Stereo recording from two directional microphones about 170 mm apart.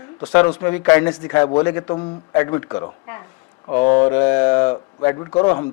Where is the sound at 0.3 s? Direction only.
10° left (ahead or behind).